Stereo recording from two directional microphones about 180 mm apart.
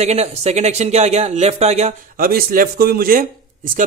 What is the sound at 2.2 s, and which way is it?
A man's voice, 55° right (ahead or behind).